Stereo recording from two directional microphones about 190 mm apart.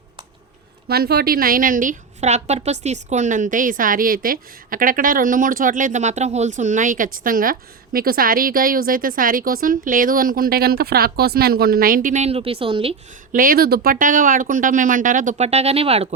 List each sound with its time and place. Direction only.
0.9 s a woman's voice: 55° right (ahead or behind); by 13.0 s 30° right (ahead or behind)
13.3 s a woman's voice: 50° right (ahead or behind); by 16.0 s 30° right (ahead or behind)